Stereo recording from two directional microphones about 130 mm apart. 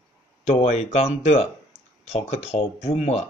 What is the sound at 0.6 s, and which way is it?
Speech, 55° left (ahead or behind).